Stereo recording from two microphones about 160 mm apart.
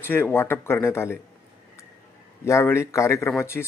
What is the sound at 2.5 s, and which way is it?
Speech, 15° left (ahead or behind).